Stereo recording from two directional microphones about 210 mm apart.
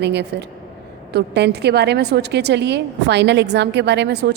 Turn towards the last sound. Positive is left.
turn(degrees=-55)  # may be behind; listen again after turning